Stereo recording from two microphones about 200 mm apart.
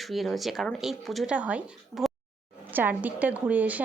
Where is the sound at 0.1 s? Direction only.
Centre (ahead or behind).